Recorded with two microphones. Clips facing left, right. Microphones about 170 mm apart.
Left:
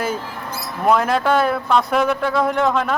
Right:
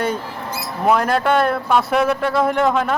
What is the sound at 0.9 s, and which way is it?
Speech, centre (ahead or behind).